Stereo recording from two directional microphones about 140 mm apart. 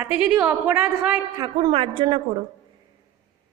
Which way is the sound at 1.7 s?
40° right (ahead or behind).